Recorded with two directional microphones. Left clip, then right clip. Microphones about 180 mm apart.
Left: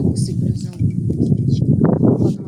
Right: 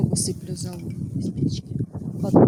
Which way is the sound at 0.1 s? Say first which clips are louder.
Left 4 dB; 75° right (ahead or behind).